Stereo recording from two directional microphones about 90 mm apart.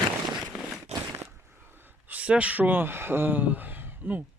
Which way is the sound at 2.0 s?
15° right (ahead or behind).